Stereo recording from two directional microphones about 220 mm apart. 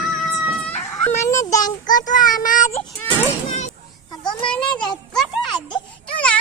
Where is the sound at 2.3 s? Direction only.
35° left (ahead or behind).